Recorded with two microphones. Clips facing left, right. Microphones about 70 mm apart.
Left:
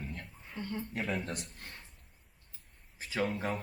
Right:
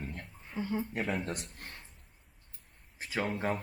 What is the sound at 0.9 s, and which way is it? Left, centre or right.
Speech, right.